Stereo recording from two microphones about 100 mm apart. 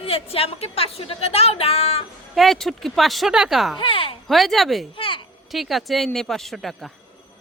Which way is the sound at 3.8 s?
65° left (ahead or behind).